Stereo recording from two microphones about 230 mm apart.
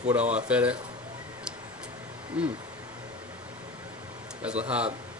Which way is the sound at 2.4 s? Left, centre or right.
Centre.